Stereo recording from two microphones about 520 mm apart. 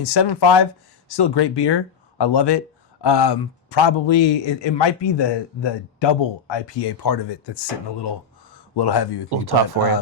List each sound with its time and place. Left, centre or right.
0.0 s a man's voice: left
9.3 s speech: right